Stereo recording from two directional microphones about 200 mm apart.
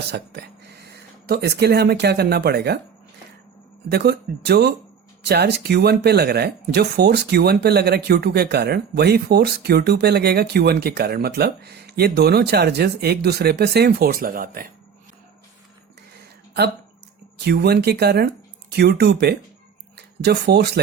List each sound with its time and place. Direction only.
0.1 s speech: 55° right (ahead or behind)
3.8 s speech: 55° right (ahead or behind)
17.3 s speech: 55° right (ahead or behind)